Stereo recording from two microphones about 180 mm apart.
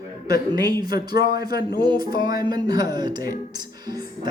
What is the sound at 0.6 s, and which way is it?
Speech, 20° right (ahead or behind).